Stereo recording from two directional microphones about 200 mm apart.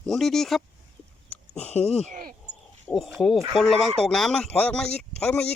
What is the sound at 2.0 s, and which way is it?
Speech, 40° right (ahead or behind).